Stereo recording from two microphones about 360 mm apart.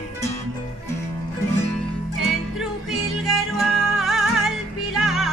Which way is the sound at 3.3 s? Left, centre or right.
Centre.